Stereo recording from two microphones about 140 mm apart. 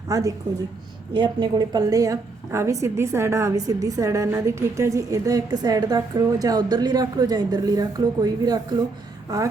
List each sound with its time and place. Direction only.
0.1 s a woman's voice: 25° right (ahead or behind)